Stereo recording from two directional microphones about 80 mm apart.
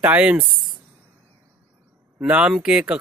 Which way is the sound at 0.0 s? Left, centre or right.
Centre.